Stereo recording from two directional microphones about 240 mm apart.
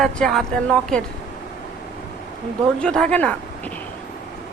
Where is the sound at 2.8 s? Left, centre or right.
Centre.